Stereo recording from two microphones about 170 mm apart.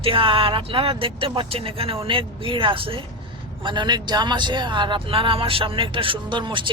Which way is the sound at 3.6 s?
25° right (ahead or behind).